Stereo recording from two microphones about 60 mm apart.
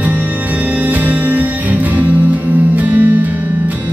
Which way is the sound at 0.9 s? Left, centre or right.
Right.